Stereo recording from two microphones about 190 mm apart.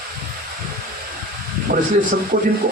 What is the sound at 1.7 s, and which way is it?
Speech, 40° right (ahead or behind).